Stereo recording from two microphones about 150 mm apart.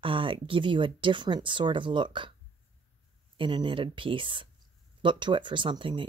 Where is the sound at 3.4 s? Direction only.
35° right (ahead or behind).